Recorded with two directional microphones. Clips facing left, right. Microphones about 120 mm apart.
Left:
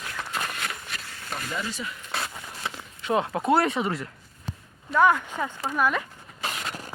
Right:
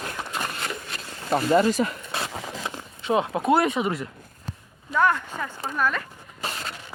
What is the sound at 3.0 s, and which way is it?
Speech, 20° right (ahead or behind).